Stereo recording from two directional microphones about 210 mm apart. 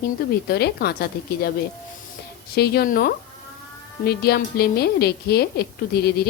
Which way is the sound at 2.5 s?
45° left (ahead or behind).